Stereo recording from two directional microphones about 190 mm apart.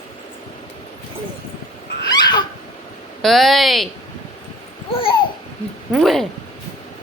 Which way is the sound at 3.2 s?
Centre (ahead or behind).